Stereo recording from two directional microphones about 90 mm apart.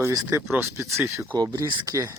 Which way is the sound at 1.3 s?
45° right (ahead or behind).